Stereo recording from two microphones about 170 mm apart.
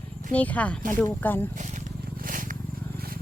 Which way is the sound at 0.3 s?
10° left (ahead or behind).